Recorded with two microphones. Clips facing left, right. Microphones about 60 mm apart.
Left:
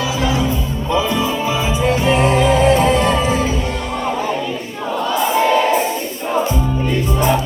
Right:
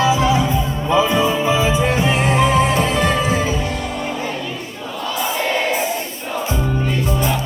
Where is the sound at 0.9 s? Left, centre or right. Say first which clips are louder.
Right 2 dB; right.